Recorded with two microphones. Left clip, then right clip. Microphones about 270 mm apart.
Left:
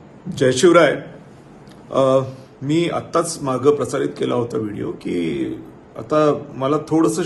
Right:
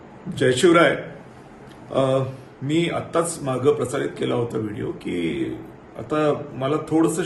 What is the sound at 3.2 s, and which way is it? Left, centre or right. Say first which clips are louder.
Speech: left 4 dB; centre.